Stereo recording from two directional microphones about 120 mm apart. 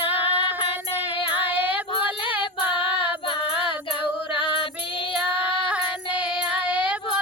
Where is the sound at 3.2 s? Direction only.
45° left (ahead or behind).